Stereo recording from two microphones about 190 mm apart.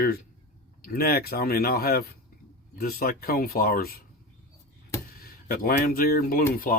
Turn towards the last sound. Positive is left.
turn(degrees=45)  # may be behind; listen again after turning